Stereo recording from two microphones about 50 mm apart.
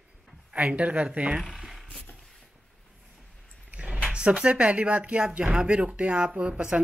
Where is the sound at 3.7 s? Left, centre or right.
Right.